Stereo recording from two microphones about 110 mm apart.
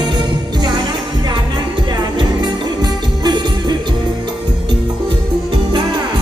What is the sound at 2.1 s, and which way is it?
Music, 40° right (ahead or behind).